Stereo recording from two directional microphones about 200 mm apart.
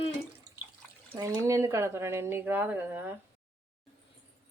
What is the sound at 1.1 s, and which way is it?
Speech, 15° right (ahead or behind).